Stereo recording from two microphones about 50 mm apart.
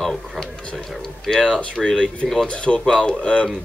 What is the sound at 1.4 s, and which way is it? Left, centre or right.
Speech, centre.